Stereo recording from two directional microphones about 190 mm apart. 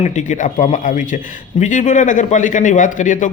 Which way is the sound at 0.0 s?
40° left (ahead or behind).